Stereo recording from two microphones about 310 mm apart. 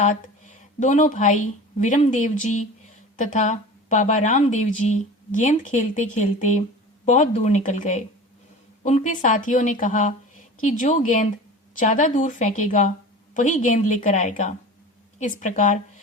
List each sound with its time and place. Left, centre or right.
0.0 s a woman's voice: left